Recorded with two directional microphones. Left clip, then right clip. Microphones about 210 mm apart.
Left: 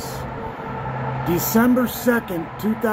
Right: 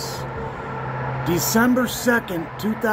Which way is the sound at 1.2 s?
15° right (ahead or behind).